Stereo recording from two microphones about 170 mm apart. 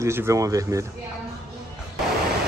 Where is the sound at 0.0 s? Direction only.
15° right (ahead or behind).